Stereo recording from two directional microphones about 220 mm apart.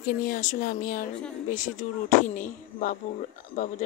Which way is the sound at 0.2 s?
35° left (ahead or behind).